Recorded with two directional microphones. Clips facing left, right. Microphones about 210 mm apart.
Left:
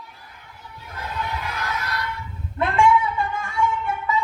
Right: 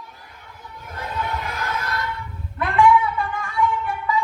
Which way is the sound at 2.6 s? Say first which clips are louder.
Right 2 dB; 25° left (ahead or behind).